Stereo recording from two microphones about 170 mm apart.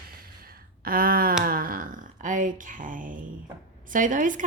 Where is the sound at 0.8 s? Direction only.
60° right (ahead or behind).